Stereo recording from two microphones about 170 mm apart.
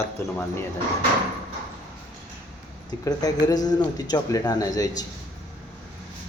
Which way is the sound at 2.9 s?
20° left (ahead or behind).